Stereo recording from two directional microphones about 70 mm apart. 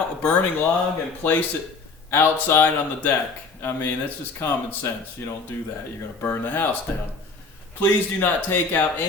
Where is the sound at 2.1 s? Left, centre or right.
Left.